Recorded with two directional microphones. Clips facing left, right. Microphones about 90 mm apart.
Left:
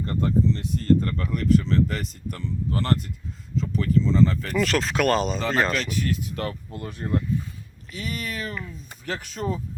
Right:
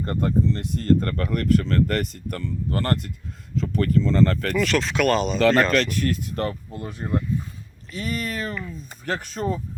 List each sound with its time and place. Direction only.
0.0 s speech: 50° right (ahead or behind)
4.5 s speech: 35° left (ahead or behind)
5.4 s speech: 85° right
5.7 s speech: 50° right (ahead or behind)
6.7 s speech: 25° right (ahead or behind)
7.9 s speech: 40° right (ahead or behind)